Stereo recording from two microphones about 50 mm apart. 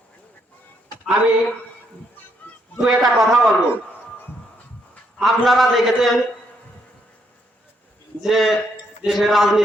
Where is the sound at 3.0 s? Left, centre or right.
Centre.